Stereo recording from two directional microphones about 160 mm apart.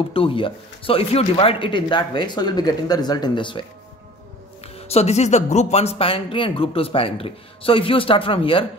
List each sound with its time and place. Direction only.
0.1 s speech: 35° left (ahead or behind)
4.7 s speech: 40° left (ahead or behind)